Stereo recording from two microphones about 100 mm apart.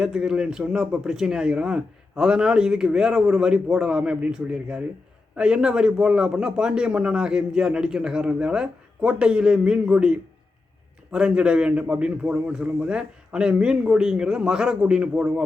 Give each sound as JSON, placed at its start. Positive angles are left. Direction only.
{"t": 0.0, "sound": "speech", "side_deg": -5}